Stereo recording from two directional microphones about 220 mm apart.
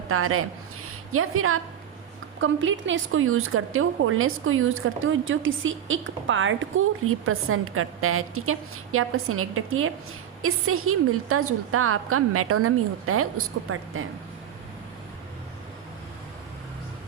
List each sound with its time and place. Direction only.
0.1 s a woman's voice: 75° right (ahead or behind)
2.4 s a woman's voice: 60° right (ahead or behind)